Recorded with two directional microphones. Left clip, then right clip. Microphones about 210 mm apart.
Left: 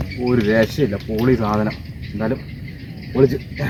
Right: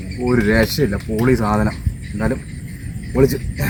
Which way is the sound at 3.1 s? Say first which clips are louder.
Even; 15° right (ahead or behind).